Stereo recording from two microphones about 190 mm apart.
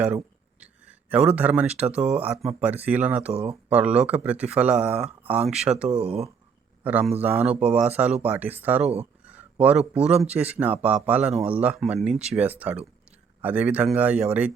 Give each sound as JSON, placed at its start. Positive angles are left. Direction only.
{"t": 0.6, "sound": "a sound", "side_deg": -5}
{"t": 1.4, "sound": "speech", "side_deg": -10}
{"t": 2.0, "sound": "speech", "side_deg": -35}
{"t": 2.2, "sound": "speech", "side_deg": -5}
{"t": 4.9, "sound": "speech", "side_deg": -30}
{"t": 5.2, "sound": "speech", "side_deg": -10}
{"t": 6.1, "sound": "speech", "side_deg": -35}
{"t": 6.8, "sound": "speech", "side_deg": -10}
{"t": 9.2, "sound": "a sound", "side_deg": -5}
{"t": 10.3, "sound": "speech", "side_deg": -10}